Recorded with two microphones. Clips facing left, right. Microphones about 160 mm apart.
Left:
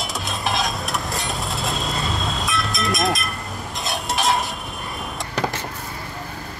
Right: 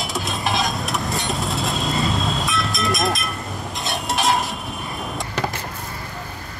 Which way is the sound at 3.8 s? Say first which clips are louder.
Right 1 dB; centre (ahead or behind).